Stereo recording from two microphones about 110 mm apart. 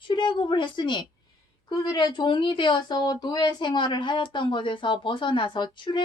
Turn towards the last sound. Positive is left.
turn(degrees=45)  # may be behind; listen again after turning